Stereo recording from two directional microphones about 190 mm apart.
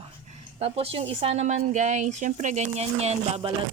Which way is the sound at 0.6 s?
30° right (ahead or behind).